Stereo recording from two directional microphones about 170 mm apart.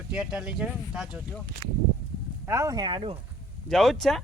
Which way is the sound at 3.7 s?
Centre (ahead or behind).